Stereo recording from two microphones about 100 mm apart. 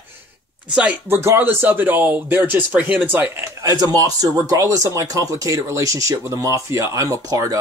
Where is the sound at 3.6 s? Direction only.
40° right (ahead or behind).